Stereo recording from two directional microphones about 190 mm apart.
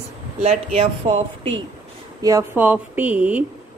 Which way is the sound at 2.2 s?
15° right (ahead or behind).